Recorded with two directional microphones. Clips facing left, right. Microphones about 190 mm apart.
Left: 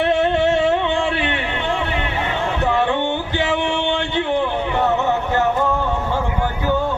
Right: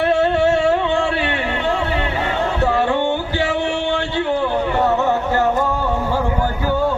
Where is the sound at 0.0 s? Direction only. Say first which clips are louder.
Right 1 dB; 20° left (ahead or behind).